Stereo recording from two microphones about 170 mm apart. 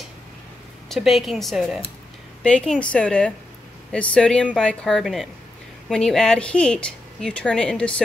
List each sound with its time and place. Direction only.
0.8 s speech: centre (ahead or behind)